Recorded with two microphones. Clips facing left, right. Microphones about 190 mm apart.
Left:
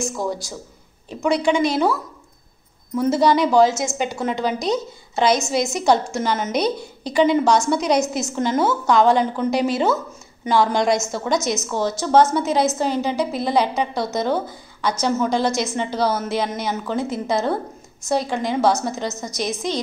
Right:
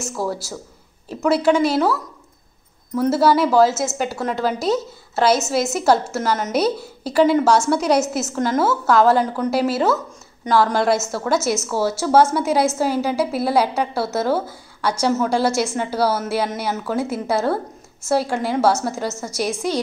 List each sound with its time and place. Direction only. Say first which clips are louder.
0.0 s a woman's voice: even; 5° right (ahead or behind)
3.0 s a woman's voice: right 1 dB; 5° right (ahead or behind)